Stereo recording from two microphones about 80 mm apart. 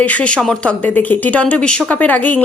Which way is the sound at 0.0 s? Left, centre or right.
Centre.